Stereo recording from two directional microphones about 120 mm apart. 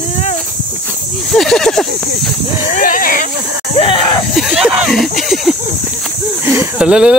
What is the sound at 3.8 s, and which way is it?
Speech, 45° left (ahead or behind).